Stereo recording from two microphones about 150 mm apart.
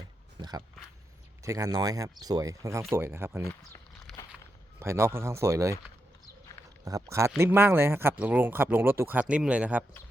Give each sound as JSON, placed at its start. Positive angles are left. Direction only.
{"t": 0.3, "sound": "speech", "side_deg": -25}
{"t": 3.4, "sound": "speech", "side_deg": 15}
{"t": 4.8, "sound": "speech", "side_deg": -15}
{"t": 6.8, "sound": "speech", "side_deg": -20}